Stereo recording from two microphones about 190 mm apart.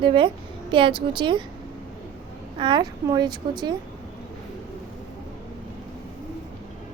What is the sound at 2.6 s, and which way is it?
A woman's voice, 25° right (ahead or behind).